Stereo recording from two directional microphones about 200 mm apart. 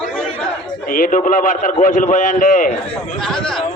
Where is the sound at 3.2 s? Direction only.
5° left (ahead or behind).